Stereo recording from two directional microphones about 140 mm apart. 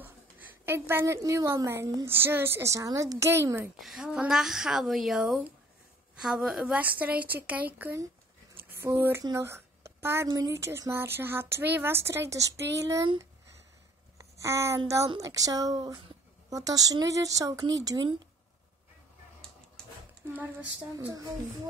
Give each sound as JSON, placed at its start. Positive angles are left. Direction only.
{"t": 0.7, "sound": "a woman's voice", "side_deg": -15}
{"t": 3.8, "sound": "a woman's voice", "side_deg": -5}
{"t": 14.1, "sound": "a sound", "side_deg": -20}
{"t": 15.1, "sound": "a woman's voice", "side_deg": -25}